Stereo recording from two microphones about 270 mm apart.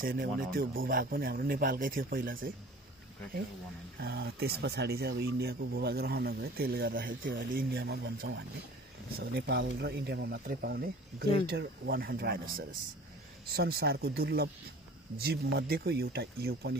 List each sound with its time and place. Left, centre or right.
0.0 s speech: right
4.0 s speech: right